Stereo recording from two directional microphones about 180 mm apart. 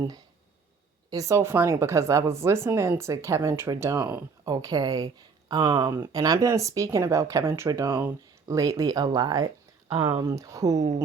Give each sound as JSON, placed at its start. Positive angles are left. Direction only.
{"t": 1.1, "sound": "speech", "side_deg": -20}
{"t": 10.2, "sound": "speech", "side_deg": -20}